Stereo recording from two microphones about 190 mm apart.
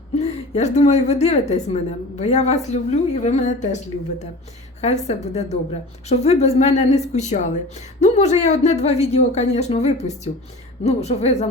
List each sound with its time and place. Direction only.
0.2 s a woman's voice: 35° left (ahead or behind)
4.8 s a woman's voice: 35° left (ahead or behind)